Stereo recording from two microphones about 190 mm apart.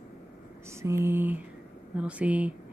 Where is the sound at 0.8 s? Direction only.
15° right (ahead or behind).